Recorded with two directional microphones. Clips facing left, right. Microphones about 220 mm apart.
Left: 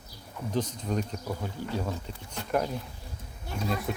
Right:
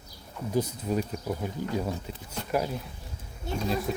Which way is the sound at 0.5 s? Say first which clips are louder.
Right 2 dB; 10° right (ahead or behind).